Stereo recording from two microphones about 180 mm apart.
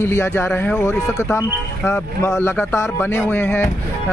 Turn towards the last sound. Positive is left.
turn(degrees=10)  # may be behind; listen again after turning